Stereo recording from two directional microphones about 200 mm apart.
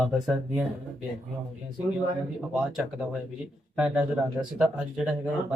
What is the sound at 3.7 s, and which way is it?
Speech, 5° right (ahead or behind).